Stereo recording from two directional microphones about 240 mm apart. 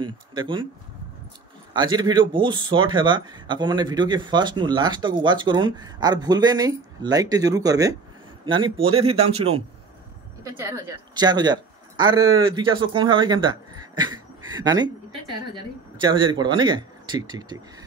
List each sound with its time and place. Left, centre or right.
0.0 s speech: centre
1.7 s speech: centre
10.4 s a woman's voice: centre